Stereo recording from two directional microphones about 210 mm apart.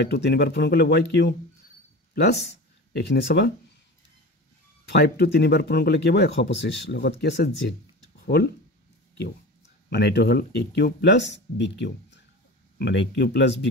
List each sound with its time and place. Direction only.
0.0 s speech: 50° left (ahead or behind)
2.9 s speech: 55° left (ahead or behind)
4.8 s speech: 50° left (ahead or behind)
9.8 s speech: 50° left (ahead or behind)